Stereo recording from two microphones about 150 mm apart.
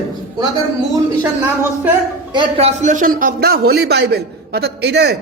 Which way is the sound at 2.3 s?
40° right (ahead or behind).